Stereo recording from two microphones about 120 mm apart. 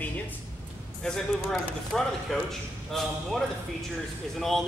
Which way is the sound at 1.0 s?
5° left (ahead or behind).